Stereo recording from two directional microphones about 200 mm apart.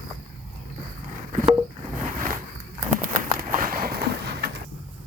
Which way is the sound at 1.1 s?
40° right (ahead or behind).